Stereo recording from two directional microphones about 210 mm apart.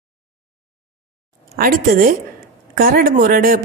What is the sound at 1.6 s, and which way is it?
A woman's voice, 45° right (ahead or behind).